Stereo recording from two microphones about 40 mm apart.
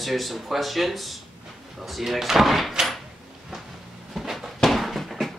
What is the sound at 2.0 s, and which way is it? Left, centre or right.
Speech, centre.